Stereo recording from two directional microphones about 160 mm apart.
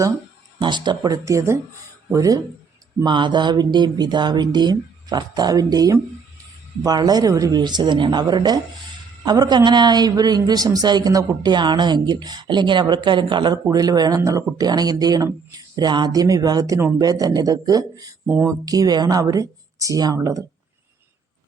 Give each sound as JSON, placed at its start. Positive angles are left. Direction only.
{"t": 0.6, "sound": "a man's voice", "side_deg": -30}